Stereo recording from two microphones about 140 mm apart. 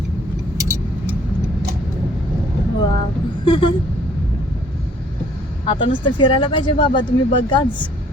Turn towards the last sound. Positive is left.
turn(degrees=35)  # may be behind; listen again after turning